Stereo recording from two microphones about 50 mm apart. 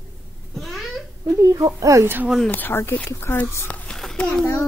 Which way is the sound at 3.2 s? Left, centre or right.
Left.